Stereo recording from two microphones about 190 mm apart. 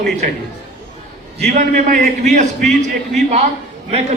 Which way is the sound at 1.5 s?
40° right (ahead or behind).